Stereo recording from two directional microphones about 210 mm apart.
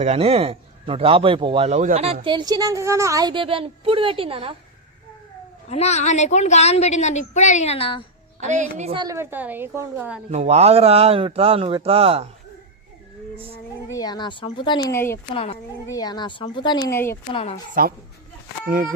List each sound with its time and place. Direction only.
0.0 s a woman's voice: 30° right (ahead or behind)
2.2 s a woman's voice: 20° right (ahead or behind)
5.6 s a woman's voice: 30° left (ahead or behind)
8.4 s a woman's voice: 35° right (ahead or behind); by 10.2 s 10° right (ahead or behind)
10.3 s a woman's voice: 30° right (ahead or behind)
13.9 s speech: 20° left (ahead or behind)
17.3 s speech: 30° left (ahead or behind)